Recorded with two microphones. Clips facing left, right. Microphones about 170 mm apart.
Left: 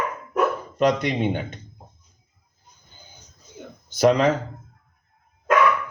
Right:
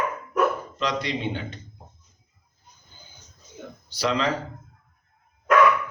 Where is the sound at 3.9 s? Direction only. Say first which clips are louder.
Left 7 dB; 50° left (ahead or behind).